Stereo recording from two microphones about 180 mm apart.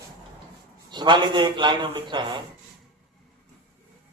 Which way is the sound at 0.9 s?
25° right (ahead or behind).